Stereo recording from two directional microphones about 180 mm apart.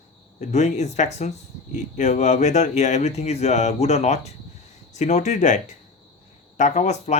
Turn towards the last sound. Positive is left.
turn(degrees=40)  # may be behind; listen again after turning